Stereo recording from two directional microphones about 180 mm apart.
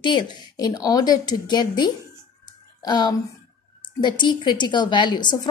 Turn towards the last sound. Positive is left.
turn(degrees=25)  # may be behind; listen again after turning